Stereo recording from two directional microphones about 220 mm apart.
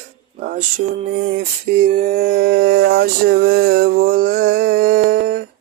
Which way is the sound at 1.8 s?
35° right (ahead or behind).